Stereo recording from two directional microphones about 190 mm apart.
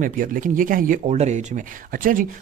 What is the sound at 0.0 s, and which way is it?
Speech, 45° right (ahead or behind).